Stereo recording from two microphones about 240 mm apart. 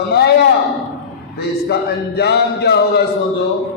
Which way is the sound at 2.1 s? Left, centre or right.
Left.